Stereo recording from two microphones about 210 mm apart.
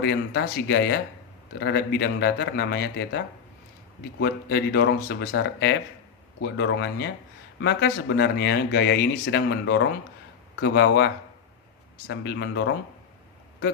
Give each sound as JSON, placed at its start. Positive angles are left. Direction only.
{"t": 0.0, "sound": "speech", "side_deg": 50}